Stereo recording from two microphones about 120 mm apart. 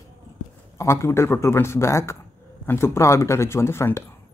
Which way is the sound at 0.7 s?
25° left (ahead or behind).